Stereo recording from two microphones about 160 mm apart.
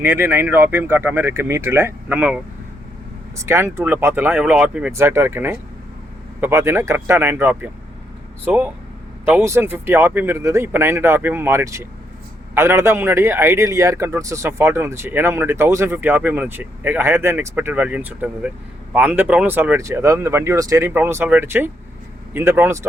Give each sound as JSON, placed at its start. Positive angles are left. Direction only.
{"t": 0.0, "sound": "a man's voice", "side_deg": -15}